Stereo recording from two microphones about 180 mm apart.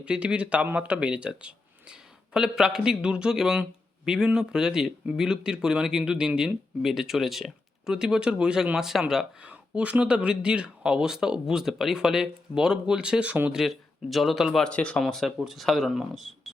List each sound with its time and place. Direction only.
0.0 s speech: 5° right (ahead or behind)